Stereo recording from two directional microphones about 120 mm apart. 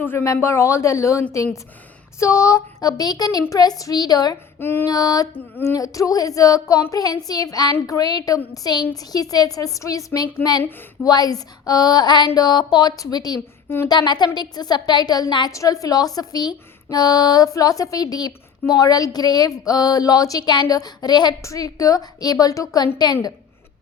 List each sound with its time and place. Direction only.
0.0 s a woman's voice: 20° left (ahead or behind)